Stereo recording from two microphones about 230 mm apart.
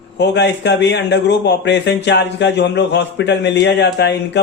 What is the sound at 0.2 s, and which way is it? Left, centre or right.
A man's voice, left.